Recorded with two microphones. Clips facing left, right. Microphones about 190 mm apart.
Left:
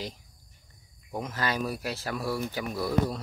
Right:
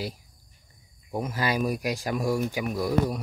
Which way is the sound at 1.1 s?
10° right (ahead or behind).